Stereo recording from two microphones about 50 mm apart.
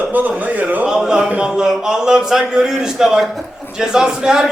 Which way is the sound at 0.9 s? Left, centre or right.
Centre.